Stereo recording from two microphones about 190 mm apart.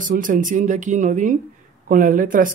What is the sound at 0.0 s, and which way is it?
Speech, 45° right (ahead or behind).